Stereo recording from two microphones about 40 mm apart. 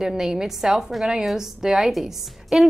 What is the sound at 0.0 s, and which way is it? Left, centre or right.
A woman's voice, centre.